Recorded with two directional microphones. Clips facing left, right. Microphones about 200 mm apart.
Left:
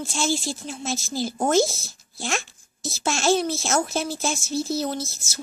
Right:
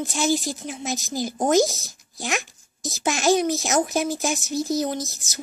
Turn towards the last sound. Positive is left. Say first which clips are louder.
# right 2 dB
turn(degrees=-15)  # may be behind; listen again after turning